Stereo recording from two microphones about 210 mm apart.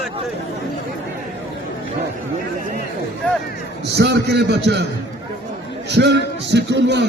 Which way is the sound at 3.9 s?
55° right (ahead or behind).